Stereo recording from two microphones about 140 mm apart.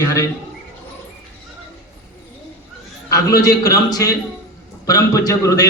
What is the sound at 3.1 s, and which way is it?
Speech, 25° left (ahead or behind).